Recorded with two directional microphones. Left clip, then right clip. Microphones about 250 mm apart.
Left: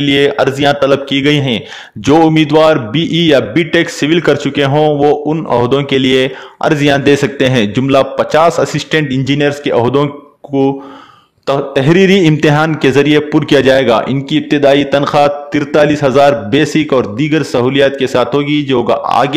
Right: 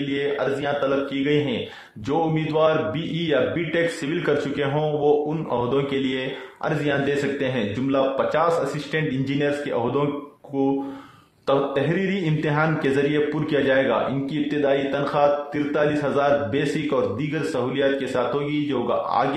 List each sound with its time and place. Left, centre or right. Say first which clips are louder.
0.1 s a man's voice: left 13 dB; left